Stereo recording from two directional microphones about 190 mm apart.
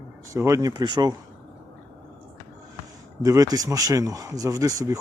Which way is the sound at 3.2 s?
20° right (ahead or behind).